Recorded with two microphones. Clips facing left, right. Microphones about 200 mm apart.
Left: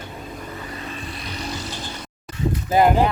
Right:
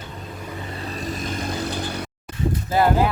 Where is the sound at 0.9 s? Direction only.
40° right (ahead or behind); by 2.3 s 60° right (ahead or behind).